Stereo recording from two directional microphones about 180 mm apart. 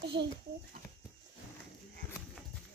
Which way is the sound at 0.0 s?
65° right (ahead or behind).